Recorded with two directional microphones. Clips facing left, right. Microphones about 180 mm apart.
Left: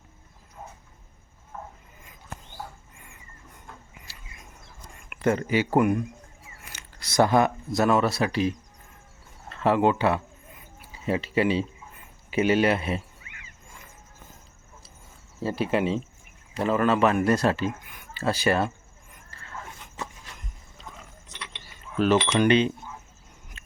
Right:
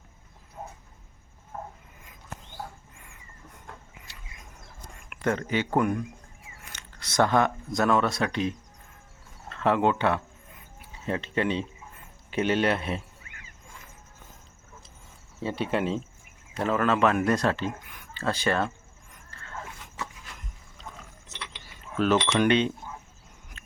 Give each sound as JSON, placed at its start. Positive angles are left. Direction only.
{"t": 1.5, "sound": "a sound", "side_deg": -40}
{"t": 5.0, "sound": "speech", "side_deg": 5}
{"t": 15.4, "sound": "speech", "side_deg": 5}
{"t": 21.9, "sound": "speech", "side_deg": 0}